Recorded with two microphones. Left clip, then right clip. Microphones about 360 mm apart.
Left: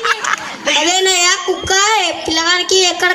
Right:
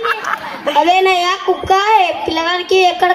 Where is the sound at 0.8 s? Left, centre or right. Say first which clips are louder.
Right 1 dB; centre.